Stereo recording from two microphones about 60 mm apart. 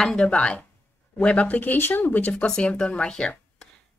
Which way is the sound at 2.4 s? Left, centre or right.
Centre.